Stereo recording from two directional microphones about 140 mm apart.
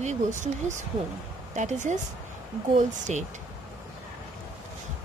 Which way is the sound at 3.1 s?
55° right (ahead or behind).